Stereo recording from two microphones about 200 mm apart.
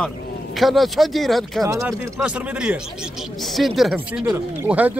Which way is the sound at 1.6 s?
15° right (ahead or behind).